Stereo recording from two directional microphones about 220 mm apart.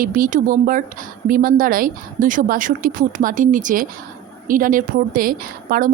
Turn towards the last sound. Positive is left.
turn(degrees=-40)  # may be behind; listen again after turning